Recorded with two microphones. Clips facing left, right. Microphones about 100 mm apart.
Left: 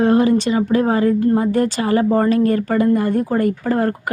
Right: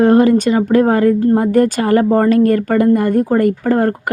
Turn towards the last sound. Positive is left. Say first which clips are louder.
# right 4 dB
turn(degrees=-45)  # may be behind; listen again after turning